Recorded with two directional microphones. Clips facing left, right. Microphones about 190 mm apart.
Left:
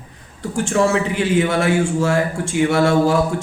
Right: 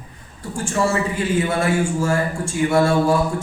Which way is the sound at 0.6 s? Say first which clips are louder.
Left 3 dB; 75° left (ahead or behind).